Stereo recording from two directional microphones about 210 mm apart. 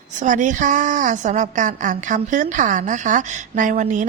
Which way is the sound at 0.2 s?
35° right (ahead or behind).